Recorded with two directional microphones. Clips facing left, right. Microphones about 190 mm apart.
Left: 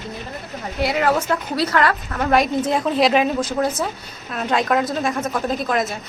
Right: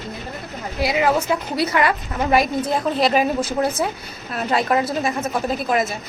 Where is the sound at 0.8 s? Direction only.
10° right (ahead or behind).